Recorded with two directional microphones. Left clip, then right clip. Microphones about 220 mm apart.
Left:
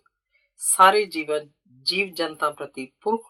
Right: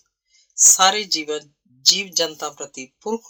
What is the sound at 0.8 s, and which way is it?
Speech, 45° right (ahead or behind).